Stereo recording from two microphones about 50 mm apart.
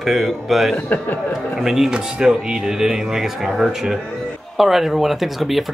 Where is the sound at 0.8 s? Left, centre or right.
Left.